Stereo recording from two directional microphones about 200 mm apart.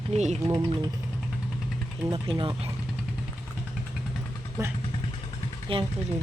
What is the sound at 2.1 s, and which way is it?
Speech, 25° right (ahead or behind).